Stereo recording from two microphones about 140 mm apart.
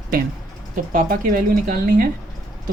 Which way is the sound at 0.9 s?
85° right.